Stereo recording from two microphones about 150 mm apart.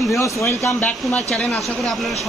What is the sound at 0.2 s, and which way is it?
Speech, 20° left (ahead or behind).